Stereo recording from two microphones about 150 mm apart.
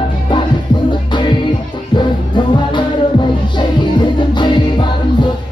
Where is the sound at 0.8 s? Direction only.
30° left (ahead or behind).